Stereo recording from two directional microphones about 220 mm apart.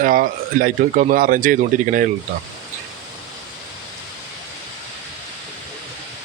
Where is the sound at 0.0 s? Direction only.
40° right (ahead or behind).